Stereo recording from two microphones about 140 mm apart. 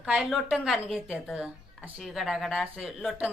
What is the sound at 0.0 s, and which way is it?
A woman's voice, 5° right (ahead or behind).